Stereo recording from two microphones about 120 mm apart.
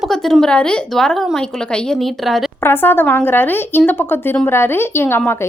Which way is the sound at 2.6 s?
15° left (ahead or behind).